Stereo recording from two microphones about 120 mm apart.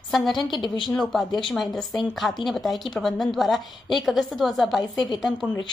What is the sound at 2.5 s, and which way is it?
A woman's voice, centre (ahead or behind).